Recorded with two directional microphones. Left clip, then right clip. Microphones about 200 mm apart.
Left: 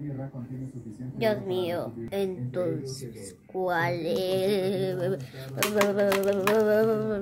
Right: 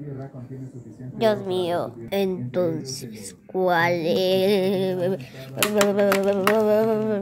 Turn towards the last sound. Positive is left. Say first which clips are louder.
# right 4 dB
turn(degrees=-5)  # may be behind; listen again after turning